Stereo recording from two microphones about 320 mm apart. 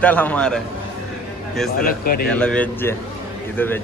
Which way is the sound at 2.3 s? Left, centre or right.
Centre.